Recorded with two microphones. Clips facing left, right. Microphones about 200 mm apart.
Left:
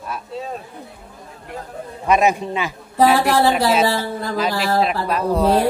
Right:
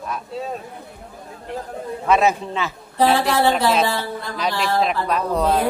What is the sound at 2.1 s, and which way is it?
Speech, 15° left (ahead or behind).